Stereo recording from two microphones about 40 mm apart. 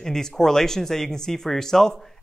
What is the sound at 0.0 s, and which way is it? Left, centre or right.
Speech, centre.